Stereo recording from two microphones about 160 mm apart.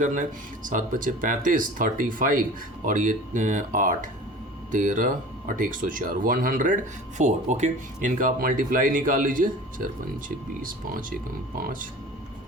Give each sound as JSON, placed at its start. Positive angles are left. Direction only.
{"t": 0.0, "sound": "speech", "side_deg": -50}
{"t": 7.2, "sound": "speech", "side_deg": -45}